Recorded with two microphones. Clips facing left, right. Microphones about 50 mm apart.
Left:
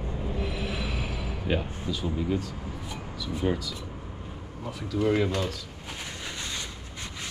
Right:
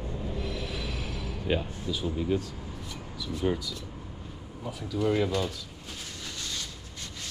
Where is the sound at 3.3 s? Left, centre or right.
Centre.